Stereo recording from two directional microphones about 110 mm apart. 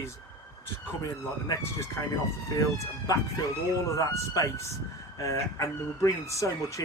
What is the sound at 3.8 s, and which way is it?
Speech, 30° left (ahead or behind).